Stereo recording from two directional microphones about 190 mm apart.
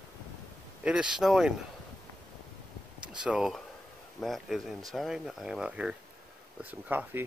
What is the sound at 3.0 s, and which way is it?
Speech, 5° right (ahead or behind).